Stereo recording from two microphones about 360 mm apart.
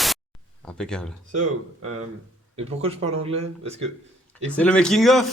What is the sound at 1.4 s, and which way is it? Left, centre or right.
Speech, right.